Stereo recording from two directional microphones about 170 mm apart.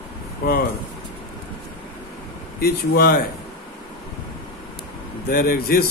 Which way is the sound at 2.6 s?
60° left (ahead or behind).